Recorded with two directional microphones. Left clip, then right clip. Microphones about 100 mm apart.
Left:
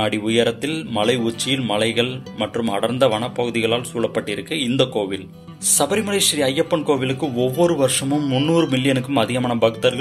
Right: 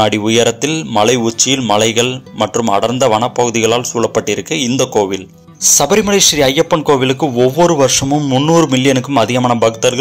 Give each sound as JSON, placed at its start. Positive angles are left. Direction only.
{"t": 0.0, "sound": "a man's voice", "side_deg": -50}